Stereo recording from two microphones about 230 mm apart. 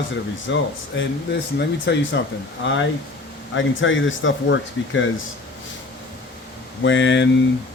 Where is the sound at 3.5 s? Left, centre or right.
Left.